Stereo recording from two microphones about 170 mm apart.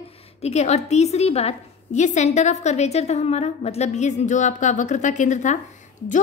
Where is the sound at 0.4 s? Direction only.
40° left (ahead or behind).